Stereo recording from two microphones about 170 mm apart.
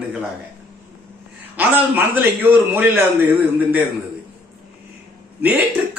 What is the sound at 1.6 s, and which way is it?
A man's voice, 10° right (ahead or behind).